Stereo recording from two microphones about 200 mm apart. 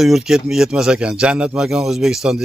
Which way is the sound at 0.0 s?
Centre (ahead or behind).